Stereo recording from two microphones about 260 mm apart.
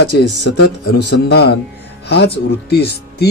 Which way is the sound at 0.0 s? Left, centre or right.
Left.